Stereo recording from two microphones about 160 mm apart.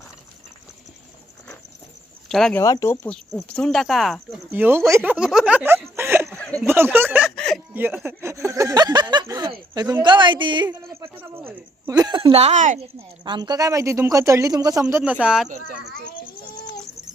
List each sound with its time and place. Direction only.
2.3 s speech: centre (ahead or behind)
2.6 s speech: 20° left (ahead or behind)
3.5 s speech: 5° left (ahead or behind)
4.5 s speech: 15° right (ahead or behind)
6.0 s a sound: 15° right (ahead or behind)
7.3 s chuckle: 5° left (ahead or behind)
7.7 s speech: 10° right (ahead or behind); by 10.7 s 30° right (ahead or behind)
11.0 s a sound: 15° right (ahead or behind)
12.3 s speech: 45° right (ahead or behind)
13.2 s speech: 30° right (ahead or behind)
15.0 s speech: 5° right (ahead or behind)